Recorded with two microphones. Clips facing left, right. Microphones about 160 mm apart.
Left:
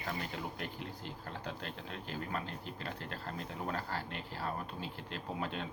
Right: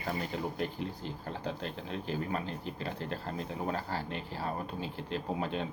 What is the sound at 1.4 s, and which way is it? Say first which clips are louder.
Speech: right 7 dB; 20° right (ahead or behind).